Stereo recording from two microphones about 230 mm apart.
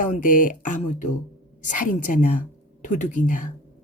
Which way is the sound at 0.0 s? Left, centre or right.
Left.